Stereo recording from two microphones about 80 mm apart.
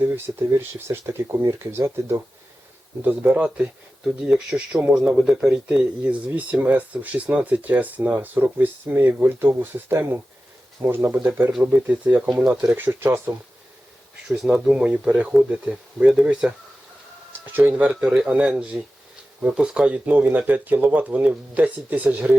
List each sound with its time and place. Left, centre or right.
0.0 s speech: right
3.0 s speech: right
4.0 s speech: centre
12.7 s speech: right
14.3 s speech: centre
17.4 s speech: right
18.0 s speech: centre